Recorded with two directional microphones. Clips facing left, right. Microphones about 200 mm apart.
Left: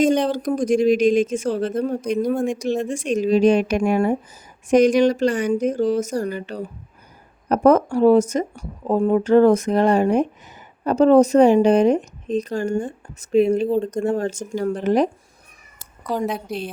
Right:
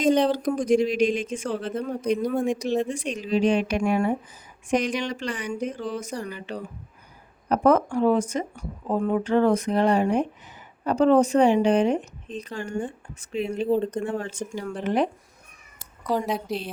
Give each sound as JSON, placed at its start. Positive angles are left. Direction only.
{"t": 0.3, "sound": "a woman's voice", "side_deg": 45}
{"t": 13.7, "sound": "speech", "side_deg": -5}
{"t": 13.9, "sound": "speech", "side_deg": 40}